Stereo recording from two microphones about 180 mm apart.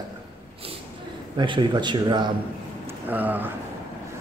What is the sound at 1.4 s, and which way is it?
Speech, 25° right (ahead or behind).